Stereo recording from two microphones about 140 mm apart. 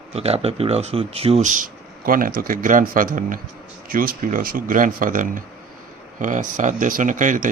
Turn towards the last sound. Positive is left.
turn(degrees=-70)  # may be behind; listen again after turning